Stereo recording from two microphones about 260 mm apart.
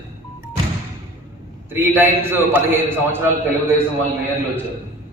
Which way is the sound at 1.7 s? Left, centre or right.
Centre.